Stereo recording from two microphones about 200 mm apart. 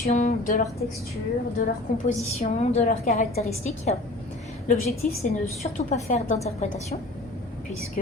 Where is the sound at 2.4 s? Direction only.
35° left (ahead or behind).